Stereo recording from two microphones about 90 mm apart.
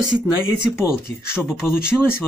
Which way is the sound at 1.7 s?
25° left (ahead or behind).